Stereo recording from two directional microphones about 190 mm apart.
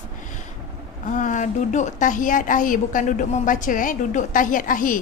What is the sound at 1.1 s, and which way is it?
A woman's voice, 40° left (ahead or behind).